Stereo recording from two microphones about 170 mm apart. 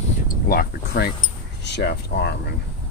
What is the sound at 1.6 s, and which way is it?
Speech, 80° left.